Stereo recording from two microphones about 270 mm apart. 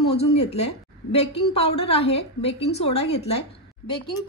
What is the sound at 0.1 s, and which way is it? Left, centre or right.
A woman's voice, left.